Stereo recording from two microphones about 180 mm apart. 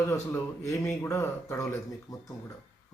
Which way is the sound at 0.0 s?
15° left (ahead or behind).